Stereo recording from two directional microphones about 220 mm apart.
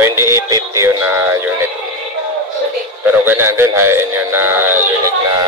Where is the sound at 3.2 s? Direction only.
10° right (ahead or behind).